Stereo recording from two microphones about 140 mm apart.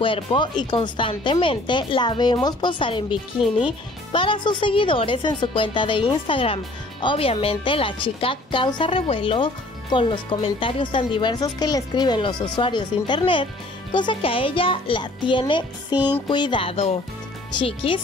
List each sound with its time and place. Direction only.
0.0 s a woman's voice: 35° left (ahead or behind)
3.3 s speech: 5° right (ahead or behind)
4.1 s a woman's voice: 35° left (ahead or behind)